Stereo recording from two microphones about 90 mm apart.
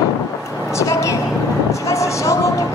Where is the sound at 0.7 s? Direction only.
35° left (ahead or behind).